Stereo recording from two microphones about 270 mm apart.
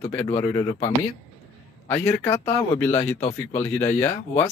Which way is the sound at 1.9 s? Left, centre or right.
Centre.